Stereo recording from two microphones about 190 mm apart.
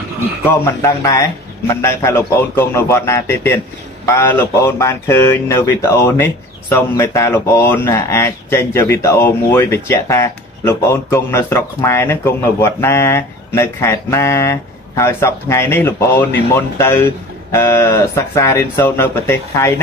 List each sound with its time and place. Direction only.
0.5 s speech: 15° left (ahead or behind)